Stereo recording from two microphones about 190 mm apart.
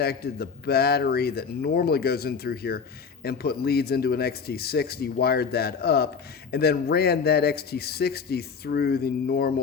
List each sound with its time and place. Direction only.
0.0 s speech: 55° left (ahead or behind)